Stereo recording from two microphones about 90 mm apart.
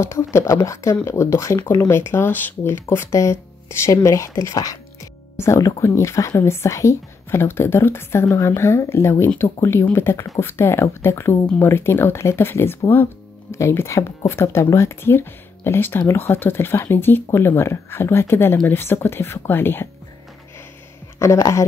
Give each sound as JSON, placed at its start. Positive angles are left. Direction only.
{"t": 0.0, "sound": "speech", "side_deg": 30}
{"t": 21.2, "sound": "speech", "side_deg": 35}